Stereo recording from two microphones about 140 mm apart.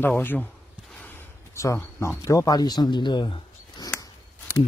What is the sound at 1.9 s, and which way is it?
Speech, 20° left (ahead or behind).